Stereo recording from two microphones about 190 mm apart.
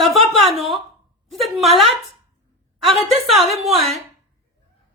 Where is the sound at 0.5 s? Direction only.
Centre (ahead or behind).